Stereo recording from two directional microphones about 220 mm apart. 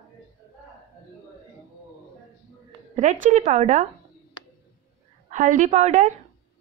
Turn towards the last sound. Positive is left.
turn(degrees=-30)  # may be behind; listen again after turning